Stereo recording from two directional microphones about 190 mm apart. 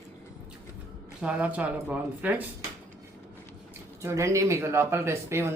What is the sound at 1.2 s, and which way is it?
Speech, 5° right (ahead or behind).